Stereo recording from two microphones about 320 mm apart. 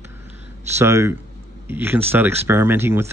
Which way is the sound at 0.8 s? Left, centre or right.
Centre.